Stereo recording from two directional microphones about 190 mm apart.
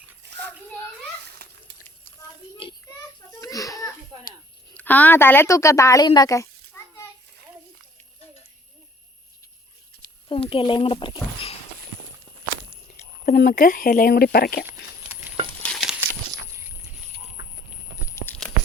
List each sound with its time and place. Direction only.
0.2 s children playing: 65° right (ahead or behind)
3.4 s a sound: 20° left (ahead or behind)
4.7 s a woman's voice: 10° left (ahead or behind)
10.2 s speech: 30° left (ahead or behind)
13.2 s speech: 45° left (ahead or behind)
15.6 s coin: centre (ahead or behind)
18.1 s a sound: 15° left (ahead or behind)